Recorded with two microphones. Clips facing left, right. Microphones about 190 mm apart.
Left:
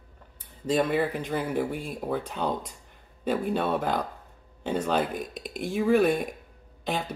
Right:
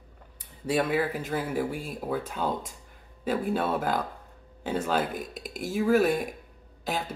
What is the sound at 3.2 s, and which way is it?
Speech, 5° right (ahead or behind).